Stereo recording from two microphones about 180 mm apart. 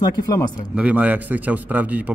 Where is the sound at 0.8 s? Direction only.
5° right (ahead or behind).